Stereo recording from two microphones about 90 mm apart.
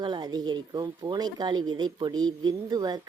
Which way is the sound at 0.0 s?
50° right (ahead or behind).